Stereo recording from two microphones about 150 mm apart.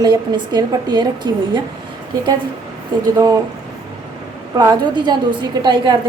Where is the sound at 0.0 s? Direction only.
30° right (ahead or behind).